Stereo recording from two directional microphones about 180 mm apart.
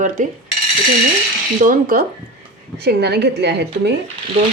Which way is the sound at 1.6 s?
50° right (ahead or behind).